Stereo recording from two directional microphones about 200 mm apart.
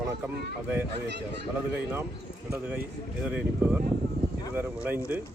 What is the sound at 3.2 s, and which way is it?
Speech, 5° right (ahead or behind).